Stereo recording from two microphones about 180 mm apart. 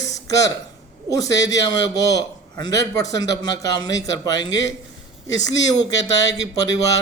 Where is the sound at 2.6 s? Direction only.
20° left (ahead or behind).